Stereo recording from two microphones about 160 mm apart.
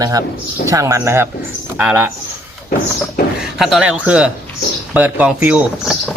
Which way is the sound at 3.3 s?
5° right (ahead or behind).